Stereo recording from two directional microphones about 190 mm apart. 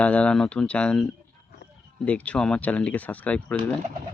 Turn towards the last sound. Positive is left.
turn(degrees=5)  # may be behind; listen again after turning